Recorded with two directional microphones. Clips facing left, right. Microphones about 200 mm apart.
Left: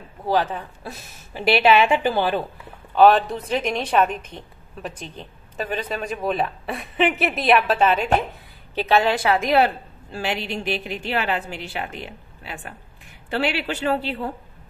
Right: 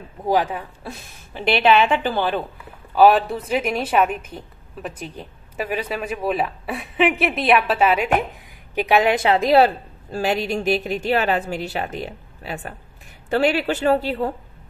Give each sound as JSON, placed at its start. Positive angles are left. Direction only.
{"t": 0.3, "sound": "a woman's voice", "side_deg": -10}
{"t": 0.8, "sound": "a woman's voice", "side_deg": 5}
{"t": 2.9, "sound": "a woman's voice", "side_deg": -5}